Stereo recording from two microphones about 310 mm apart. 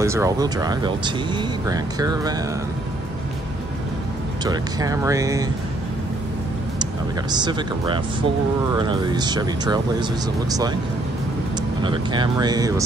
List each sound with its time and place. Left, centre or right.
0.0 s speech: centre
4.5 s speech: centre
6.8 s speech: centre
11.8 s speech: centre